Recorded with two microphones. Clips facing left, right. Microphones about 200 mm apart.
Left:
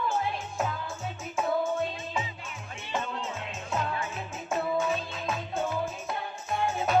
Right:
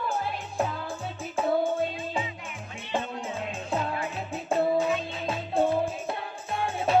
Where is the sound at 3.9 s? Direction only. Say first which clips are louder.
Right 3 dB; 35° right (ahead or behind).